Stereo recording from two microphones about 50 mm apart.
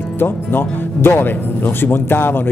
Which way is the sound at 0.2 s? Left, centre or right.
Left.